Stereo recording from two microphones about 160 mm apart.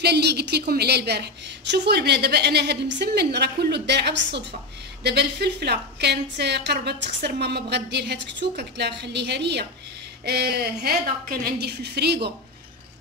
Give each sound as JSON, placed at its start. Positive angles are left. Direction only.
{"t": 0.0, "sound": "a woman's voice", "side_deg": -90}